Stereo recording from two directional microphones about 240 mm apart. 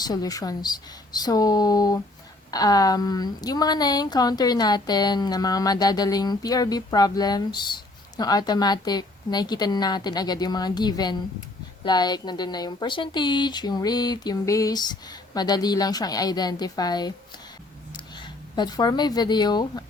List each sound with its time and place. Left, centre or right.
0.0 s a woman's voice: centre